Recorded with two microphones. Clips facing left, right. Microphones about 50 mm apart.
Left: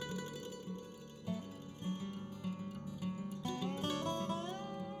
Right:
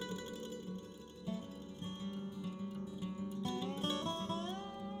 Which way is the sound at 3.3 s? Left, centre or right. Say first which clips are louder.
Right 2 dB; left.